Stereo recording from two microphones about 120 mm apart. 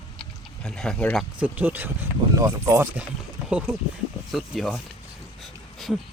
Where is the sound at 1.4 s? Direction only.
15° right (ahead or behind).